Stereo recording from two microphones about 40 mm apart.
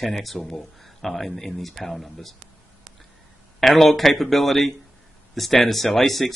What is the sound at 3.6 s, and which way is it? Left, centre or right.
Speech, centre.